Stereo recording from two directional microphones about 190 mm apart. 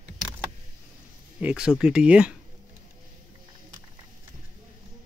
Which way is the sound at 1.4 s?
5° right (ahead or behind).